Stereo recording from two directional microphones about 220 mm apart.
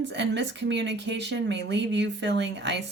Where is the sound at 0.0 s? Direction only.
55° right (ahead or behind).